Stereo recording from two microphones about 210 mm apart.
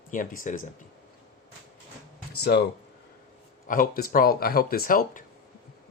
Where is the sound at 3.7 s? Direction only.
40° left (ahead or behind).